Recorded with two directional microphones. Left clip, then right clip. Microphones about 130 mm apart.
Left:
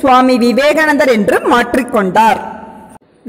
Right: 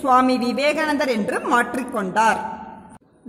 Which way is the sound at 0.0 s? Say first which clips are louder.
Left 8 dB; 35° left (ahead or behind).